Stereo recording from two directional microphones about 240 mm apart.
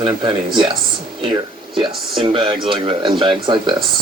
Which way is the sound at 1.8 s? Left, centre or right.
Right.